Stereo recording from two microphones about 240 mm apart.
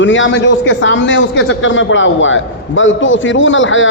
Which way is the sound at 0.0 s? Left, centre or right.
Left.